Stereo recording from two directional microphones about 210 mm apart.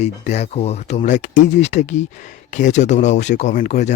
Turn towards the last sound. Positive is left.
turn(degrees=35)  # may be behind; listen again after turning